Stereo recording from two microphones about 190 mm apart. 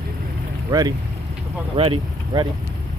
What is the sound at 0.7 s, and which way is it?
Speech, 20° right (ahead or behind).